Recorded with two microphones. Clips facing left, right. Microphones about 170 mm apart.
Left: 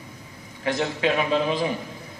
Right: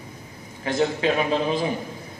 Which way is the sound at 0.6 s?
45° right (ahead or behind).